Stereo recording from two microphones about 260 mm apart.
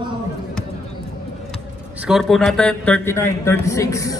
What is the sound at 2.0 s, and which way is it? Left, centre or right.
A man's voice, centre.